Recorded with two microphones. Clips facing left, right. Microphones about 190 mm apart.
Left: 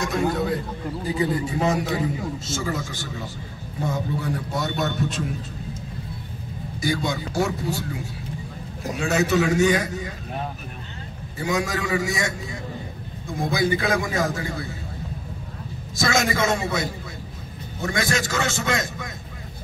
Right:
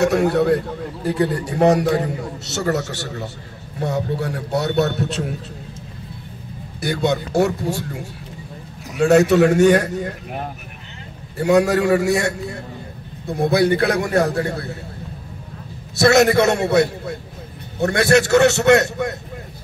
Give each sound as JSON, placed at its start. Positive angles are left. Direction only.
{"t": 0.0, "sound": "a man's voice", "side_deg": -70}
{"t": 6.8, "sound": "a man's voice", "side_deg": -65}
{"t": 9.0, "sound": "a man's voice", "side_deg": -65}
{"t": 11.3, "sound": "a man's voice", "side_deg": -65}
{"t": 16.0, "sound": "a man's voice", "side_deg": -65}